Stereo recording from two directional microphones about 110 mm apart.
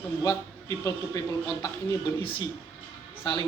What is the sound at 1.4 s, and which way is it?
A man's voice, 40° left (ahead or behind).